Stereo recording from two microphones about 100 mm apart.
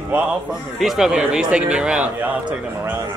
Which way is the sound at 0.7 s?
Centre (ahead or behind).